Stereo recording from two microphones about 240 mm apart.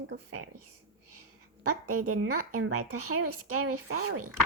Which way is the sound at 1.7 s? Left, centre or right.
Right.